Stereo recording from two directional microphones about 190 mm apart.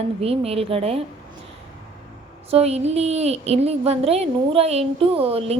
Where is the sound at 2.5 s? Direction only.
35° right (ahead or behind).